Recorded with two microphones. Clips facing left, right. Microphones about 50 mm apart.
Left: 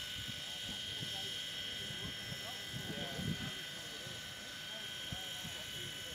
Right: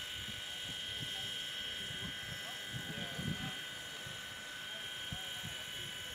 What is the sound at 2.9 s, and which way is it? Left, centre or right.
Vehicle, centre.